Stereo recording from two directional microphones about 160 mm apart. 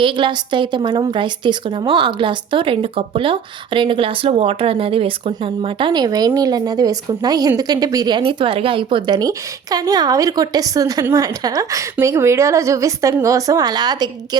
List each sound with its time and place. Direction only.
0.0 s a woman's voice: 30° right (ahead or behind)